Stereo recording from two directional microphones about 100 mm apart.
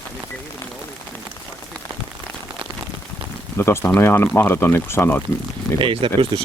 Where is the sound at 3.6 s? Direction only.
25° left (ahead or behind).